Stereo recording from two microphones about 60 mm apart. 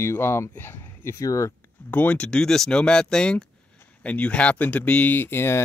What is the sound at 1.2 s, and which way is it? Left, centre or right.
Speech, left.